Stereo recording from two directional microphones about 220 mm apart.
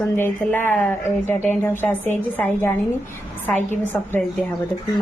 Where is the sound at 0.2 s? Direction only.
10° left (ahead or behind).